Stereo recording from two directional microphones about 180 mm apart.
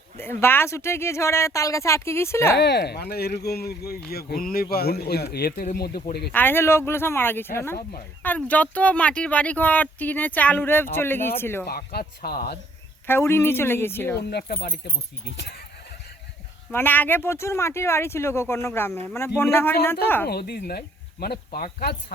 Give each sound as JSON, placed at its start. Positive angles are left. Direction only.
{"t": 0.2, "sound": "speech", "side_deg": 15}
{"t": 2.6, "sound": "speech", "side_deg": 65}
{"t": 6.3, "sound": "speech", "side_deg": 10}
{"t": 11.6, "sound": "speech", "side_deg": 60}
{"t": 13.1, "sound": "speech", "side_deg": 15}
{"t": 14.3, "sound": "speech", "side_deg": 65}
{"t": 16.7, "sound": "speech", "side_deg": 10}
{"t": 20.2, "sound": "speech", "side_deg": 60}